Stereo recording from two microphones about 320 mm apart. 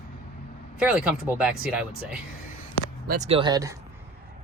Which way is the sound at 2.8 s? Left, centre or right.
Left.